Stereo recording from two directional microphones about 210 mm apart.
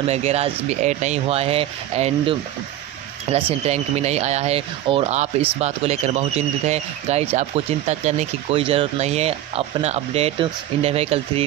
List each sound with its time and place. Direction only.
0.1 s speech: 30° right (ahead or behind)